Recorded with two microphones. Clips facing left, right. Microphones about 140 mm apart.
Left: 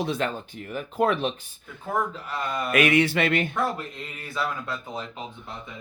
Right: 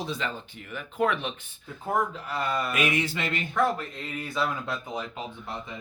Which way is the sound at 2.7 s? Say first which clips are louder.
Left 7 dB; 70° left (ahead or behind).